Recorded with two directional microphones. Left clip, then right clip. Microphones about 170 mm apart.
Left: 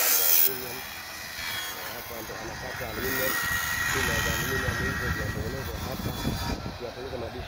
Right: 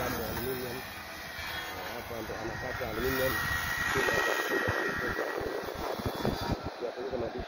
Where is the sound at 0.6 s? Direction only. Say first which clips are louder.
Left 2 dB; 15° left (ahead or behind).